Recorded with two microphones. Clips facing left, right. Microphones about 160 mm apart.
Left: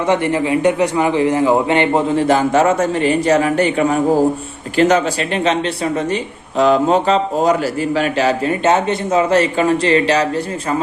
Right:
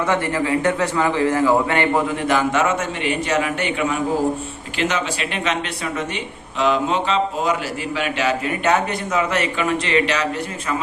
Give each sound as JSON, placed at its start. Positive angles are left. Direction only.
{"t": 0.0, "sound": "a man's voice", "side_deg": 20}